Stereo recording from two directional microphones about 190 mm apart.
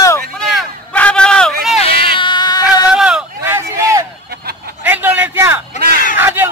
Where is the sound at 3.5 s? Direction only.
15° right (ahead or behind).